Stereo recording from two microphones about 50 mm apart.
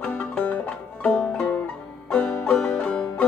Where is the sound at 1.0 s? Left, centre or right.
Left.